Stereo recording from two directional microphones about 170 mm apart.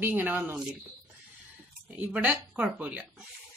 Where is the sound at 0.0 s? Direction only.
10° right (ahead or behind).